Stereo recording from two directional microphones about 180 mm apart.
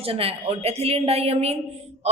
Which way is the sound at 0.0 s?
30° right (ahead or behind).